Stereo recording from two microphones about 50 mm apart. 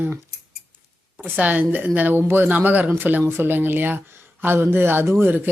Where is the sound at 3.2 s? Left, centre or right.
Right.